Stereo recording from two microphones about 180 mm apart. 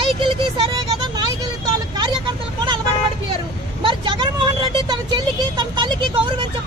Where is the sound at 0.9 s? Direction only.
20° right (ahead or behind).